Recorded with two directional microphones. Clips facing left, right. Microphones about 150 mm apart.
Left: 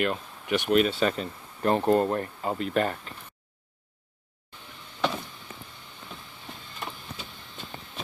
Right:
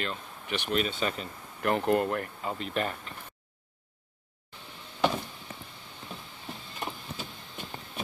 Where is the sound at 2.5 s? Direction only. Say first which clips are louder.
Left 6 dB; 40° left (ahead or behind).